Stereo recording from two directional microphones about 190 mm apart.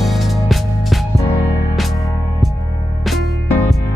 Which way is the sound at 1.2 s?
15° left (ahead or behind).